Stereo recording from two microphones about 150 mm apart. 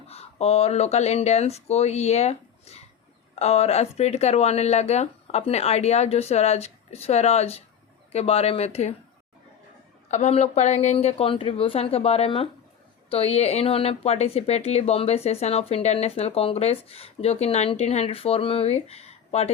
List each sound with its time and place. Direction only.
0.1 s speech: 45° left (ahead or behind)
10.1 s a woman's voice: 50° left (ahead or behind)